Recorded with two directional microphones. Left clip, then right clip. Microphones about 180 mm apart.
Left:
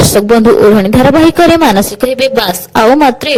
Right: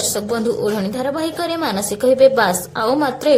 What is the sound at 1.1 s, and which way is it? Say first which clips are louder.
A woman's voice: left 16 dB; 50° left (ahead or behind).